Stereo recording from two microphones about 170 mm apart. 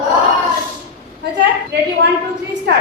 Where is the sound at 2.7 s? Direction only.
80° right.